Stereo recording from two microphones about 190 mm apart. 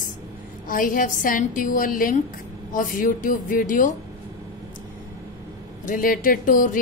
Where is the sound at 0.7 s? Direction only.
45° left (ahead or behind).